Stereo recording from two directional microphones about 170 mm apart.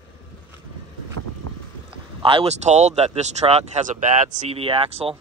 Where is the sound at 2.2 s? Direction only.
35° right (ahead or behind).